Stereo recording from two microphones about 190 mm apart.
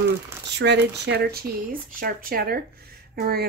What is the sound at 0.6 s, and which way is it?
Speech, 65° right (ahead or behind).